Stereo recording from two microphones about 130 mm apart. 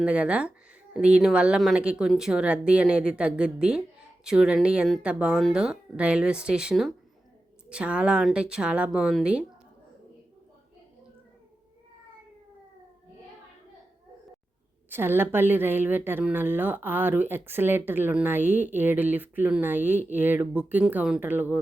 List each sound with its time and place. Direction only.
0.0 s a woman's voice: 10° right (ahead or behind)
14.8 s a woman's voice: 15° right (ahead or behind)